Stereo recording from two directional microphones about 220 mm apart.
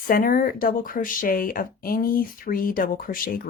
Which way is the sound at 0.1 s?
40° left (ahead or behind).